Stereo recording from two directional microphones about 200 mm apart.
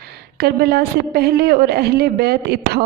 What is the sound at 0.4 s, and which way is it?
A woman's voice, 50° right (ahead or behind).